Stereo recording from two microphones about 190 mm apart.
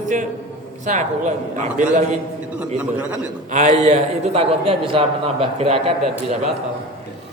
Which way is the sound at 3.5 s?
40° right (ahead or behind).